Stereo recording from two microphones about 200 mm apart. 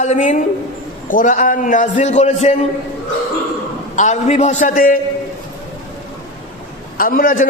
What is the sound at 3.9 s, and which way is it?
A man's voice, 35° left (ahead or behind).